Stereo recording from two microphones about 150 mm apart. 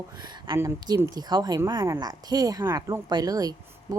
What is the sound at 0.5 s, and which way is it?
A woman's voice, 20° right (ahead or behind).